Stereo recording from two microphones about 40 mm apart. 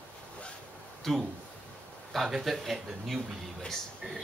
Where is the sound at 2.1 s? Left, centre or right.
Centre.